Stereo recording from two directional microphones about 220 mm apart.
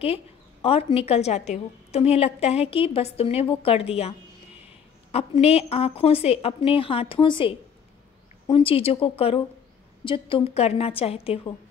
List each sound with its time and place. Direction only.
0.0 s a sound: 25° left (ahead or behind)
0.9 s a woman's voice: 25° left (ahead or behind)
5.1 s a woman's voice: 30° left (ahead or behind)